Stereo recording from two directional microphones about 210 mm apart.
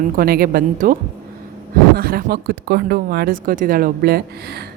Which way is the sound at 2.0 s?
45° right (ahead or behind).